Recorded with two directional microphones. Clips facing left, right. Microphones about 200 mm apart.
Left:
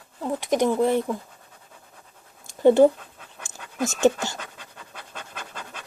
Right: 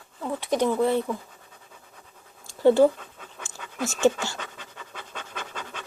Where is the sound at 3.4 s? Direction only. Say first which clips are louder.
Left 3 dB; 15° left (ahead or behind).